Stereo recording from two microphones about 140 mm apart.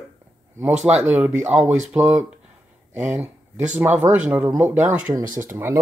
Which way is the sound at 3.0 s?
10° right (ahead or behind).